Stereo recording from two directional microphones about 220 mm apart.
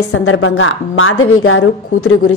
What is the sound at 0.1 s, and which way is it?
A woman's voice, 65° left (ahead or behind).